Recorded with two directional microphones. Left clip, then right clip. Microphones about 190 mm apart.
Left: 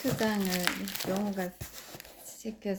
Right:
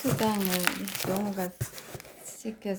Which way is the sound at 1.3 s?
10° right (ahead or behind).